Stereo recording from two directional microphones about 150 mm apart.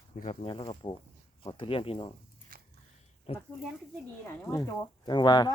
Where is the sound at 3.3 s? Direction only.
40° left (ahead or behind).